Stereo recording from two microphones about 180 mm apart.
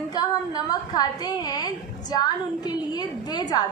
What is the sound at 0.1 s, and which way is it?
A woman's voice, 20° left (ahead or behind).